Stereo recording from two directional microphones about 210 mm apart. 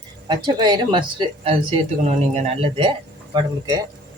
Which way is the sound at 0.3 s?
20° right (ahead or behind).